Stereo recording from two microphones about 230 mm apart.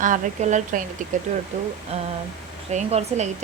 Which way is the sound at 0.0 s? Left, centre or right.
Right.